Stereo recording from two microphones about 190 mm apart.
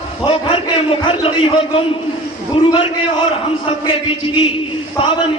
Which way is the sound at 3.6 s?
30° left (ahead or behind).